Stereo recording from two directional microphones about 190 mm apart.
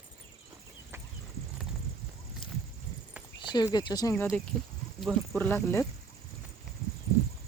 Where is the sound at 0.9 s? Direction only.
15° right (ahead or behind).